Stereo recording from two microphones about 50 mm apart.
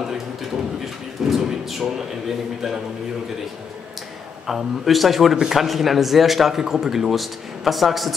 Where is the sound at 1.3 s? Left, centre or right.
Centre.